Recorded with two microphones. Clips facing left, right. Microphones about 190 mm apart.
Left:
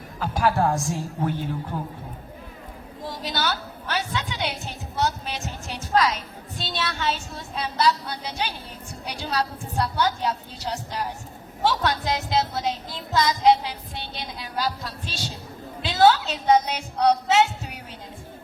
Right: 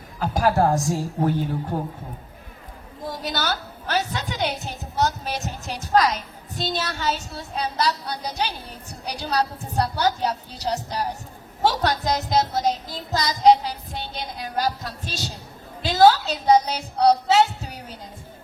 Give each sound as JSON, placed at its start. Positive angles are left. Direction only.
{"t": 0.2, "sound": "speech", "side_deg": -40}
{"t": 3.1, "sound": "a woman's voice", "side_deg": -45}